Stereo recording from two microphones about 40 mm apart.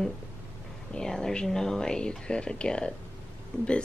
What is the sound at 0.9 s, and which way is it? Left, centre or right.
A woman's voice, centre.